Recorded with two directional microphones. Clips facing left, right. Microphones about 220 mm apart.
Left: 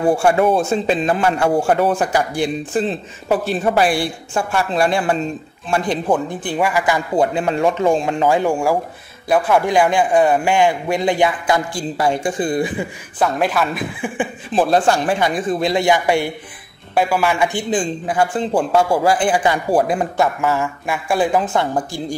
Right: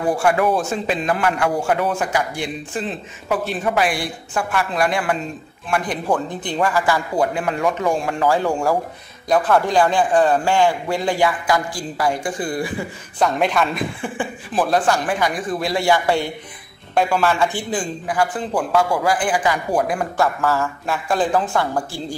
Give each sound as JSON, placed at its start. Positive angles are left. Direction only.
{"t": 0.0, "sound": "a man's voice", "side_deg": 25}
{"t": 6.1, "sound": "a man's voice", "side_deg": 10}
{"t": 13.2, "sound": "a woman's voice", "side_deg": 5}
{"t": 14.1, "sound": "a man's voice", "side_deg": 20}